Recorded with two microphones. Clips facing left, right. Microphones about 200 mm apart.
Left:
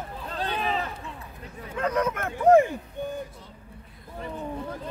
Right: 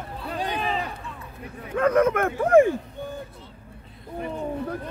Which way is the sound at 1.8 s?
55° right (ahead or behind).